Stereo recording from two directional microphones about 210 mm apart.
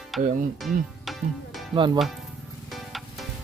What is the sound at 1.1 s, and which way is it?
Tabla, centre (ahead or behind).